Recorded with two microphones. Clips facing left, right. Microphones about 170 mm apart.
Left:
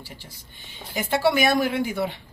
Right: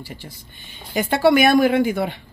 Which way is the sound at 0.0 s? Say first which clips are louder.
Right 6 dB; 55° right (ahead or behind).